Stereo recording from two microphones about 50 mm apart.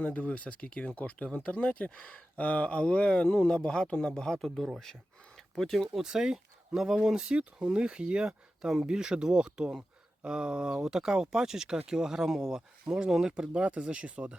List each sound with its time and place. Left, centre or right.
0.0 s speech: left; by 5.9 s centre
5.9 s speech: centre